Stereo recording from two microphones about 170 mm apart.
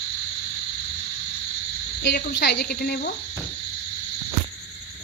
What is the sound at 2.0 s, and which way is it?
Speech, 90° left.